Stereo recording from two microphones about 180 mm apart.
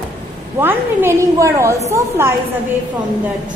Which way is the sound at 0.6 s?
10° right (ahead or behind).